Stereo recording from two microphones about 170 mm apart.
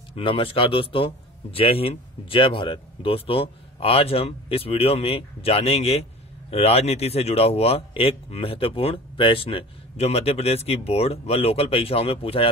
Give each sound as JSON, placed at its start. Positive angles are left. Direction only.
{"t": 0.1, "sound": "a man's voice", "side_deg": 30}